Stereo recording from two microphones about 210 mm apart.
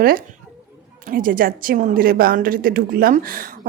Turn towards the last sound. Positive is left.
turn(degrees=-40)  # may be behind; listen again after turning